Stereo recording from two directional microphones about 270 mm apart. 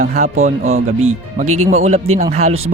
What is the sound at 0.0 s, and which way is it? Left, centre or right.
Speech, right.